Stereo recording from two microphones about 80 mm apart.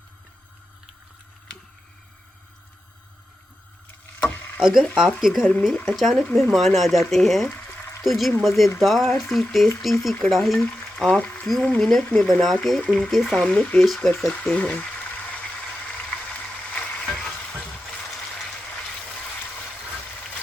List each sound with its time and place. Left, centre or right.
4.2 s a sound: left
4.6 s speech: centre
13.3 s speech: centre
13.8 s speech: centre
14.6 s speech: centre
16.7 s frying: centre